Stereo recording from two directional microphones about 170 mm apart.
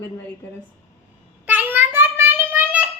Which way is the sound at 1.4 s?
10° right (ahead or behind).